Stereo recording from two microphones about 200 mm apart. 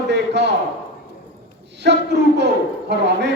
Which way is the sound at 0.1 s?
60° right (ahead or behind).